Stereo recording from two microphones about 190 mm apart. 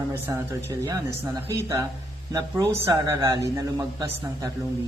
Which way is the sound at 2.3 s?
15° right (ahead or behind).